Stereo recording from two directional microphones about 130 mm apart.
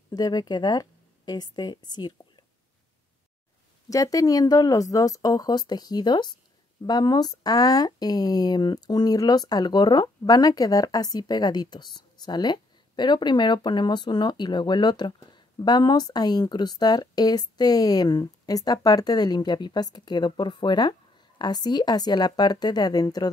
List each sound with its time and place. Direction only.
0.1 s speech: 30° left (ahead or behind)
3.9 s speech: 25° left (ahead or behind)